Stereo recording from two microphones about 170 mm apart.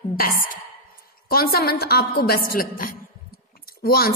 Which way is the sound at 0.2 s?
55° left (ahead or behind).